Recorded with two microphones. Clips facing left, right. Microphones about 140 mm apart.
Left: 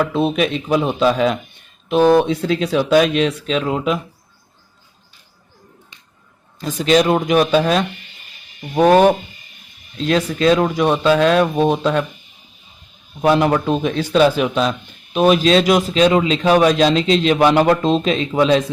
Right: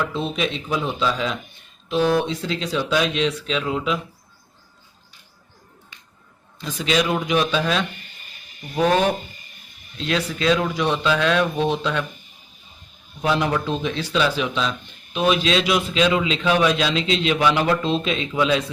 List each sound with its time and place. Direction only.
0.0 s speech: 60° left (ahead or behind)
6.6 s a man's voice: 45° left (ahead or behind)
13.2 s a man's voice: 50° left (ahead or behind)